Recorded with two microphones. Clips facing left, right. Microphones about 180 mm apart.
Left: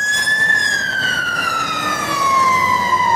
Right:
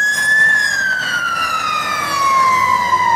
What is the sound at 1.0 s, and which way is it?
Emergency vehicle, 25° left (ahead or behind).